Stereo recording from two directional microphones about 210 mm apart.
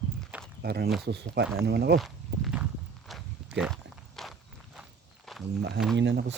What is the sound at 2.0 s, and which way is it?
Walk, centre (ahead or behind).